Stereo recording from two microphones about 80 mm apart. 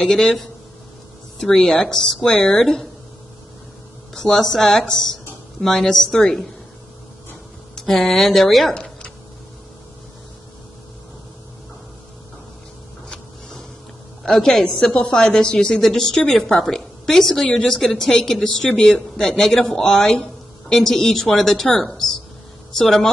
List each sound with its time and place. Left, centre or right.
0.0 s a woman's voice: centre
4.1 s a woman's voice: centre
7.7 s speech: centre
13.1 s a sound: centre
14.2 s a woman's voice: centre